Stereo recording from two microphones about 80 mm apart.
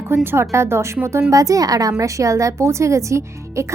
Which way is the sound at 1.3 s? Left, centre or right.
Right.